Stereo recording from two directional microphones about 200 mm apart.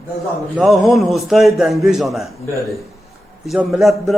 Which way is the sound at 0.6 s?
Centre (ahead or behind).